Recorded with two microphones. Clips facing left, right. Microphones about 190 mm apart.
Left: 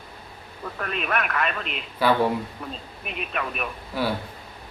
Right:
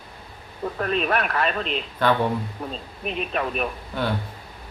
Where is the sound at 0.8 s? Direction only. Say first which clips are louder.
Right 4 dB; 35° right (ahead or behind).